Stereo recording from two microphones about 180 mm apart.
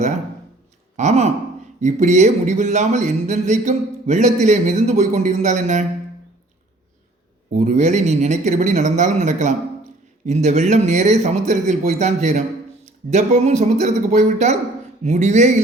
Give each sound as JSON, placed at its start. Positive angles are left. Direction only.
{"t": 0.9, "sound": "speech", "side_deg": -40}
{"t": 7.5, "sound": "speech", "side_deg": -40}